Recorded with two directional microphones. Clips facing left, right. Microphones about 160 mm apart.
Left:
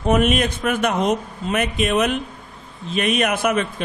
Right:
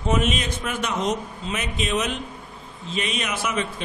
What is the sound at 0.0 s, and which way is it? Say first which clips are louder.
A man's voice: left 6 dB; 55° left (ahead or behind).